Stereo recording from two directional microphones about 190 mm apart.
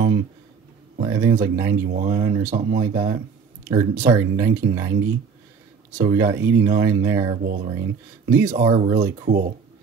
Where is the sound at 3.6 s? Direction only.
15° right (ahead or behind).